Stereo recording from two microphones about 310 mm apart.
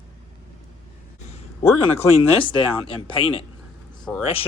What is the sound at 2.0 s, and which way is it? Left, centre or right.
Speech, centre.